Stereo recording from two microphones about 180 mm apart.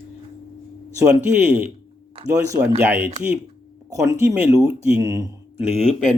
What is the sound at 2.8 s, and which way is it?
Speech, 10° right (ahead or behind).